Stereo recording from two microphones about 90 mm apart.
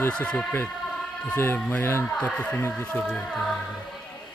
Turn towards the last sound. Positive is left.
turn(degrees=5)  # may be behind; listen again after turning